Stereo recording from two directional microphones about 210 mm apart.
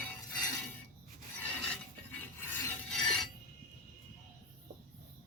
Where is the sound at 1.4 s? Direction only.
10° left (ahead or behind).